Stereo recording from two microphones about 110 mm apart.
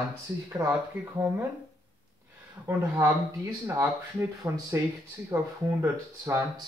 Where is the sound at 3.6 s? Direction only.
30° right (ahead or behind).